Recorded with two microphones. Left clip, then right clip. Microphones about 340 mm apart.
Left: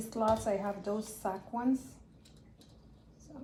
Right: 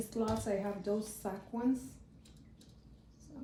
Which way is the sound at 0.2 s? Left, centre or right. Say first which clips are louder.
Left 5 dB; centre.